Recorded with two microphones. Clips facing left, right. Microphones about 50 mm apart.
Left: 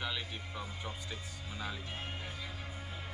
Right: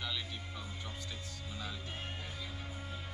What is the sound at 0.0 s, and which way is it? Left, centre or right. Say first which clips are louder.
Music: left 2 dB; centre.